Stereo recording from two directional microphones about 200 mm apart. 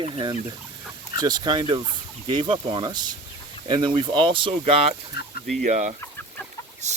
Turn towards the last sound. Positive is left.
turn(degrees=-35)  # may be behind; listen again after turning